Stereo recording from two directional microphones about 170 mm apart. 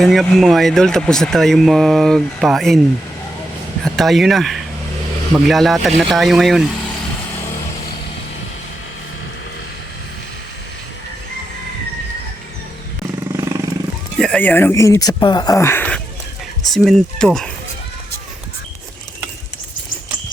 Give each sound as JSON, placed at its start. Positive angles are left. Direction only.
{"t": 0.0, "sound": "speech", "side_deg": 0}
{"t": 3.8, "sound": "speech", "side_deg": 0}
{"t": 13.3, "sound": "vehicle", "side_deg": -20}
{"t": 14.2, "sound": "speech", "side_deg": 5}